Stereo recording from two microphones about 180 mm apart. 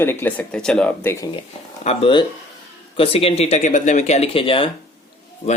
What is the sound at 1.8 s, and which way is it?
Speech, 35° left (ahead or behind).